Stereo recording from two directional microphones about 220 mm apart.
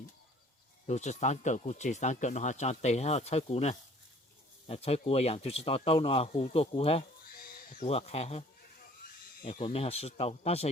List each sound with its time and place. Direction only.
0.9 s speech: 30° left (ahead or behind)